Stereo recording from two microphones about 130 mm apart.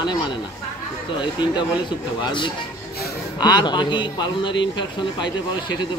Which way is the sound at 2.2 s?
40° left (ahead or behind).